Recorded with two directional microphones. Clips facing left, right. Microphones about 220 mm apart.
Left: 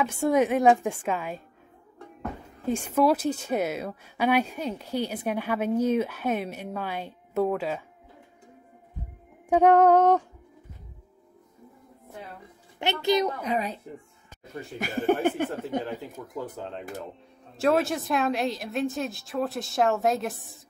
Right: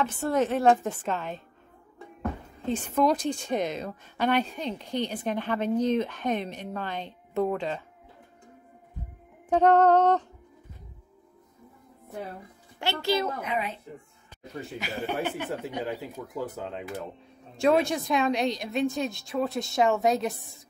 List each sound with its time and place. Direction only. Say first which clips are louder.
0.0 s a woman's voice: left 3 dB; 10° left (ahead or behind)
2.6 s a woman's voice: left 2 dB; 10° left (ahead or behind)
9.5 s a woman's voice: left 2 dB; 10° left (ahead or behind)
12.7 s speech: left 3 dB; 20° left (ahead or behind)
13.4 s a child's voice: left 3 dB; 35° left (ahead or behind)
14.8 s speech: left 7 dB; 50° left (ahead or behind)
15.8 s a woman's voice: right 1 dB; 5° right (ahead or behind)